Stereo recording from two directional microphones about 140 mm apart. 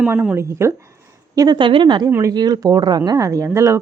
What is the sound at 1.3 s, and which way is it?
Speech, 30° right (ahead or behind).